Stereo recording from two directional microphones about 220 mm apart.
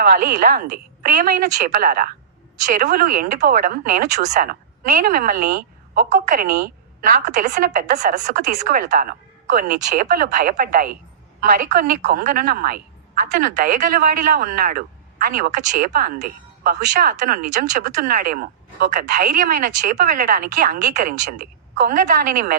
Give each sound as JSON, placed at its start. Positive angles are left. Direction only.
{"t": 0.0, "sound": "a woman's voice", "side_deg": -45}